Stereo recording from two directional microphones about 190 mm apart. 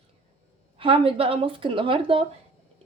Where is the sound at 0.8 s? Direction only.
30° right (ahead or behind).